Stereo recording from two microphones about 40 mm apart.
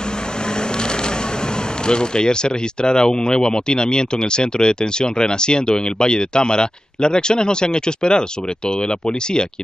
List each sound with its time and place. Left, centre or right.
1.9 s speech: left